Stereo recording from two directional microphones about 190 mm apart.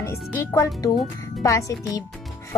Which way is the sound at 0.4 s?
15° left (ahead or behind).